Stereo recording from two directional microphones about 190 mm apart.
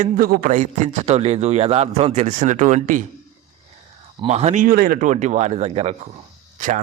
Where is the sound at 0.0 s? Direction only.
50° right (ahead or behind).